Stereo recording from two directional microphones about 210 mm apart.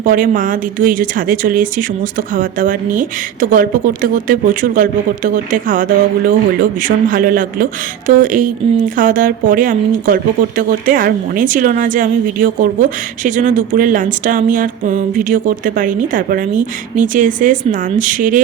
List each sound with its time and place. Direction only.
0.0 s speech: 40° right (ahead or behind)
13.2 s speech: 40° right (ahead or behind)